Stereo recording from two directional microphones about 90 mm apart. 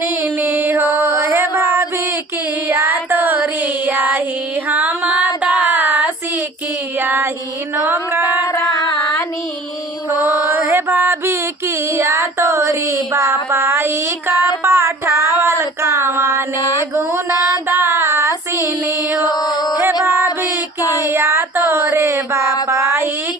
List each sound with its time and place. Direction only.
0.0 s mantra: 25° right (ahead or behind)
2.6 s child singing: 25° right (ahead or behind)
4.7 s female singing: 20° right (ahead or behind)
7.0 s child singing: 20° right (ahead or behind)
7.9 s a sound: 20° right (ahead or behind)
10.2 s mantra: 20° right (ahead or behind)
11.9 s a sound: 30° right (ahead or behind)
16.9 s female singing: 30° right (ahead or behind)
19.2 s mantra: 45° left (ahead or behind)
19.8 s music: 25° right (ahead or behind)
20.8 s child singing: 40° left (ahead or behind)
21.1 s child singing: 30° right (ahead or behind)
22.7 s mantra: 30° right (ahead or behind)